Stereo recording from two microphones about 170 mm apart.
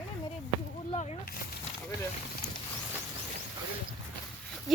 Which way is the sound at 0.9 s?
40° left (ahead or behind).